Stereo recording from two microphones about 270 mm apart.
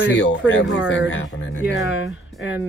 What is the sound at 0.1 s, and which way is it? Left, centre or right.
Speech, left.